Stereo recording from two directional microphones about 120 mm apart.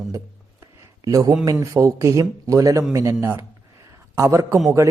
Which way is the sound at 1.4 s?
25° right (ahead or behind).